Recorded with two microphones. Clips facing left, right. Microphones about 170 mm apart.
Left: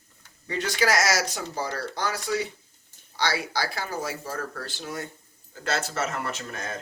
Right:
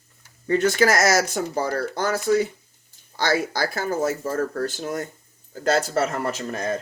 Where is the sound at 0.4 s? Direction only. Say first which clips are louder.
Right 7 dB; 50° right (ahead or behind).